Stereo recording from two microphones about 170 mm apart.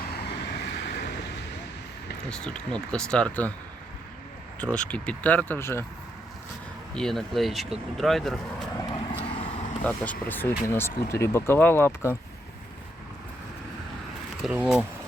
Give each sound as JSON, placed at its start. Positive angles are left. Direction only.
{"t": 0.1, "sound": "vehicle", "side_deg": 80}
{"t": 2.3, "sound": "speech", "side_deg": 5}
{"t": 4.6, "sound": "speech", "side_deg": 5}
{"t": 6.9, "sound": "speech", "side_deg": 5}
{"t": 8.9, "sound": "vehicle", "side_deg": 30}
{"t": 9.8, "sound": "speech", "side_deg": 10}
{"t": 14.4, "sound": "speech", "side_deg": -5}